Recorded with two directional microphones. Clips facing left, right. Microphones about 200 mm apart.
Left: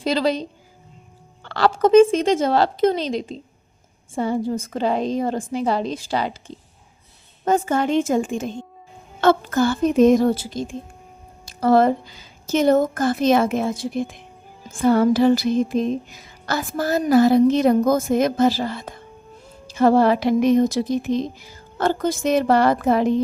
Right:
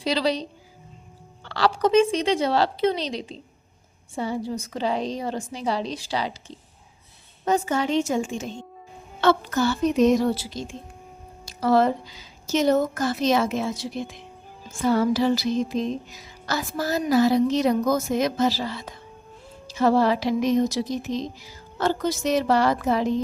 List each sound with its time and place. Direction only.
0.0 s music: 50° left (ahead or behind)
1.5 s music: 50° left (ahead or behind)
7.4 s music: 50° left (ahead or behind)
19.6 s speech: 50° left (ahead or behind)